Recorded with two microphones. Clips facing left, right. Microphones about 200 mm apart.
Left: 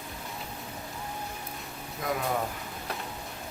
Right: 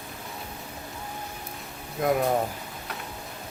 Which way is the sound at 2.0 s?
55° right (ahead or behind).